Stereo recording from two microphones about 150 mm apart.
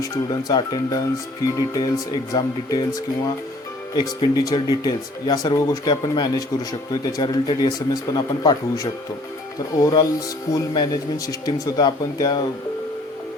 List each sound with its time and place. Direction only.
0.0 s speech: 25° left (ahead or behind)
3.9 s speech: 30° left (ahead or behind)